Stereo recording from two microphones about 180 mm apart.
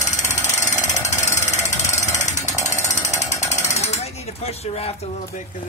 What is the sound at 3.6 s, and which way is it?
Mechanisms, 40° left (ahead or behind).